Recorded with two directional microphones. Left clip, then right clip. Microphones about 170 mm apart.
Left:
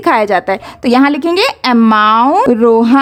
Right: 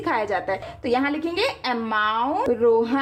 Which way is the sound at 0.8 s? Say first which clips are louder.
Left 13 dB; 60° left (ahead or behind).